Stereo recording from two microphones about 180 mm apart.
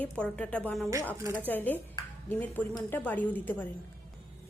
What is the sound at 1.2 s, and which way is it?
Speech, 15° right (ahead or behind).